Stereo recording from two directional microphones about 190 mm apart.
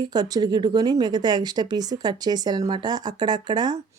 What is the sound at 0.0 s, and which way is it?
Speech, 20° right (ahead or behind).